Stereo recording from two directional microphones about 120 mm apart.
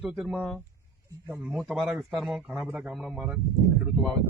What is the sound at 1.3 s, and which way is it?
Speech, 20° right (ahead or behind).